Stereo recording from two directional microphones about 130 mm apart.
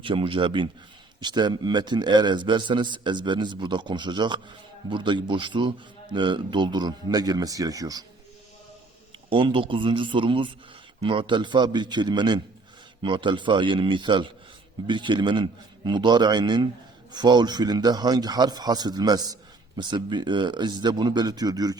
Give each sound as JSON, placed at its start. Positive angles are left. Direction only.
{"t": 0.0, "sound": "a man's voice", "side_deg": -40}
{"t": 9.3, "sound": "a man's voice", "side_deg": -40}